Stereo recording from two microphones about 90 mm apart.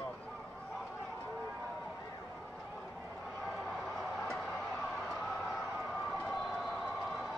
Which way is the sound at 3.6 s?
Centre (ahead or behind).